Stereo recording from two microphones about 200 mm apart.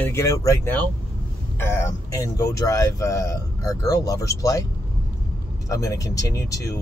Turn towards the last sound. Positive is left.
turn(degrees=15)  # may be behind; listen again after turning